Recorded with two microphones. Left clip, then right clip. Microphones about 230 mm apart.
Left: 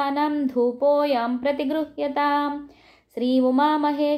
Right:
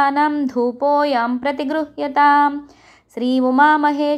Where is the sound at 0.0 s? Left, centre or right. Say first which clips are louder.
Right 7 dB; centre.